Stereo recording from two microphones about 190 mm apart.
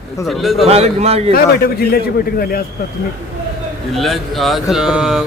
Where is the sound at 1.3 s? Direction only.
55° left (ahead or behind).